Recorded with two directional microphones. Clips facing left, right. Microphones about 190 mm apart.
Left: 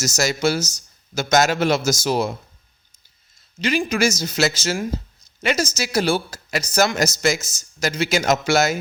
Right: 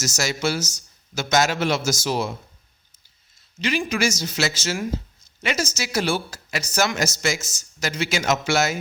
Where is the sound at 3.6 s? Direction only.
40° left (ahead or behind).